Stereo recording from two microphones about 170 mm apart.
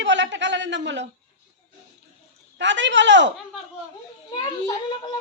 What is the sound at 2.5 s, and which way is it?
Speech, 90° right.